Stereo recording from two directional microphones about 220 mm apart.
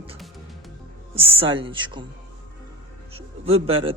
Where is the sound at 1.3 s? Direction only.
25° right (ahead or behind).